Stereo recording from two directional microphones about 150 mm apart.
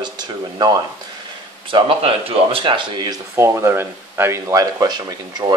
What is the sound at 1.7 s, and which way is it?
Speech, 35° right (ahead or behind).